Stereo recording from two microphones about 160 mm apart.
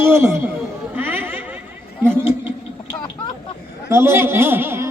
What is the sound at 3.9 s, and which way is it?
Speech, 15° right (ahead or behind).